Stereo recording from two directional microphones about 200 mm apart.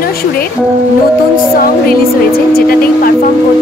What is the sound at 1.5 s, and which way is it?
Speech, 45° left (ahead or behind).